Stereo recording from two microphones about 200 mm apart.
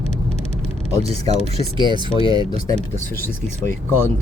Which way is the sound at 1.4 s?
30° left (ahead or behind).